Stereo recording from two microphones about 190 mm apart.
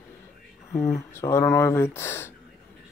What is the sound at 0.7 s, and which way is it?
Speech, 15° left (ahead or behind).